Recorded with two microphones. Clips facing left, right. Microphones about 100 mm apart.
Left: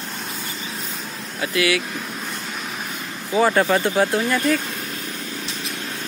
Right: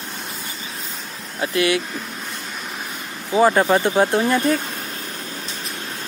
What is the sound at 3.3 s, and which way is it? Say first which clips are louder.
Speech: right 2 dB; 20° right (ahead or behind).